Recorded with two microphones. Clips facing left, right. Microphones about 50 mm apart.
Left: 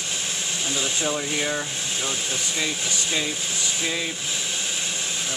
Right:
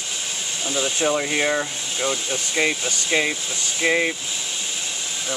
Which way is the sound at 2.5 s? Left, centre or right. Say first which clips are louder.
Right 8 dB; right.